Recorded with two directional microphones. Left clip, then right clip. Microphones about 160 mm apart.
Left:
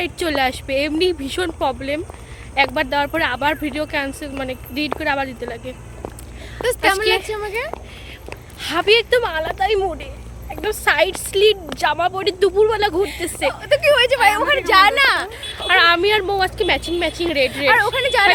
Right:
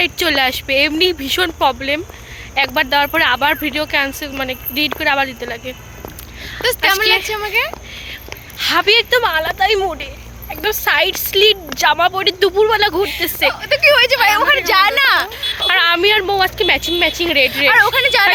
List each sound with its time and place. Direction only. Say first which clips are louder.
0.0 s speech: right 5 dB; 5° right (ahead or behind)
6.6 s a woman's voice: right 3 dB; 20° left (ahead or behind)
7.0 s speech: right 4 dB; 5° right (ahead or behind)
7.6 s speech: right 10 dB; 15° left (ahead or behind)
8.5 s speech: right 3 dB; 5° right (ahead or behind)
13.5 s a woman's voice: right 2 dB; 20° left (ahead or behind); by 15.4 s 5° left (ahead or behind)
15.5 s speech: even; 15° right (ahead or behind)
17.9 s speech: right 4 dB; 5° left (ahead or behind)